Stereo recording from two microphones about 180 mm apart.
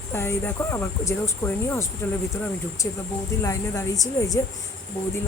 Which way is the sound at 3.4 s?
20° left (ahead or behind).